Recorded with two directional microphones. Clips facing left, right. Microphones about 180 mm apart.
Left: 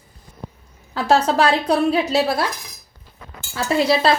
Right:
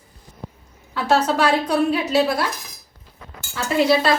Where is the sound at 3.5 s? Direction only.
30° left (ahead or behind).